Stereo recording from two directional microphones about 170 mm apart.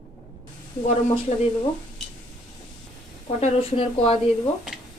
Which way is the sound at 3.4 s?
30° left (ahead or behind).